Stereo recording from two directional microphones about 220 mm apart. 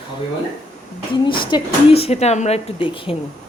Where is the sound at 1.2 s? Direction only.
20° left (ahead or behind).